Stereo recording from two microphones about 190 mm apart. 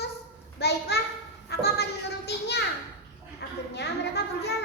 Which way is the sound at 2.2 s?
60° left (ahead or behind).